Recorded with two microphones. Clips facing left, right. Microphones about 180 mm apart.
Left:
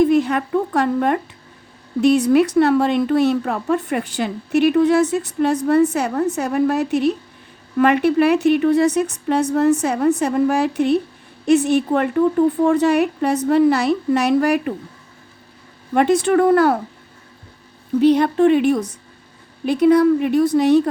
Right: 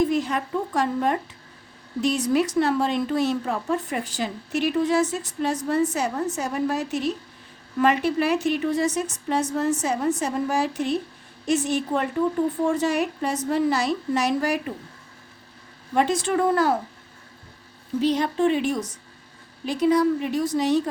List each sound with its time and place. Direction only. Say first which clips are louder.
0.0 s a woman's voice: left 7 dB; 60° left (ahead or behind)
16.0 s a woman's voice: left 7 dB; 60° left (ahead or behind)
18.0 s a woman's voice: left 8 dB; 60° left (ahead or behind)